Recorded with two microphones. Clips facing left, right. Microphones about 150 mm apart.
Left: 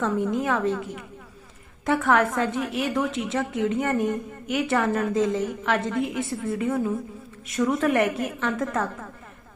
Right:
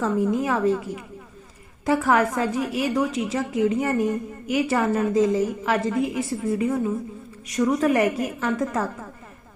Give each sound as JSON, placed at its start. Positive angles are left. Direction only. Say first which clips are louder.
{"t": 0.0, "sound": "a woman's voice", "louder": "right 2 dB", "side_deg": 0}